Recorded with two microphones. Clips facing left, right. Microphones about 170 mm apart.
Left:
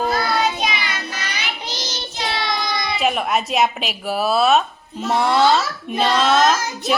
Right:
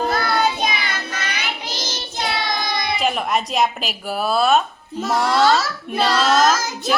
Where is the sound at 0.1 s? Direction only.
55° right (ahead or behind).